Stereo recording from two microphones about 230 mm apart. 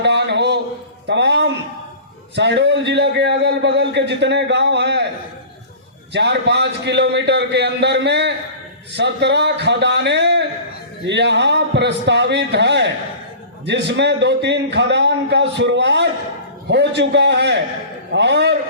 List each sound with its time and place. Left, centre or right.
0.0 s a sound: right
1.0 s music: right
2.3 s a man's voice: right
6.1 s a man's voice: right